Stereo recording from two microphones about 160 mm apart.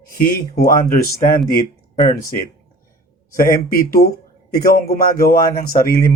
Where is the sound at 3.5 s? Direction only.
65° left (ahead or behind).